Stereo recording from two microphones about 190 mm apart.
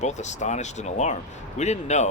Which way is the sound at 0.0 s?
40° left (ahead or behind).